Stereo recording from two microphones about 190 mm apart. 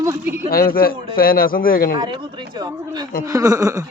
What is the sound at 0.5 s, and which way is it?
A man's voice, 50° left (ahead or behind).